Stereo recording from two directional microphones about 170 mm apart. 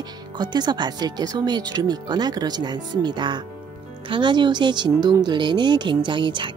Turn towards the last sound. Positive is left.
turn(degrees=-30)  # may be behind; listen again after turning